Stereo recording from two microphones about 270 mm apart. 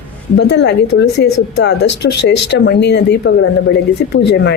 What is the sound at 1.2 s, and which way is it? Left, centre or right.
Speech, left.